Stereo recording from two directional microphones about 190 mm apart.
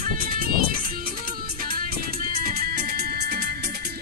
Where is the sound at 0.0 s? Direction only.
45° right (ahead or behind).